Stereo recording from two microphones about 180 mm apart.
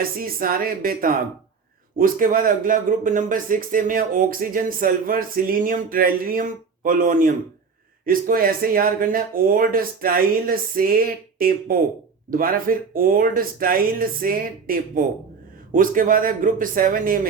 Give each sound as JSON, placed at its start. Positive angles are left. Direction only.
{"t": 0.0, "sound": "speech", "side_deg": -55}